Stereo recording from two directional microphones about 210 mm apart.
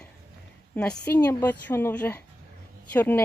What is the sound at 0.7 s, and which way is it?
Speech, 5° left (ahead or behind).